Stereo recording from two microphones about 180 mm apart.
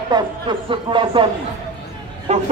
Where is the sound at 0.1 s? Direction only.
25° right (ahead or behind).